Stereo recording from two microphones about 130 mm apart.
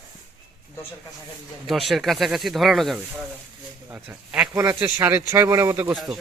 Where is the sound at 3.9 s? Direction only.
10° right (ahead or behind).